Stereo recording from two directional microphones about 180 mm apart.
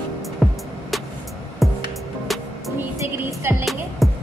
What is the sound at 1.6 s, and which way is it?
Music, centre (ahead or behind).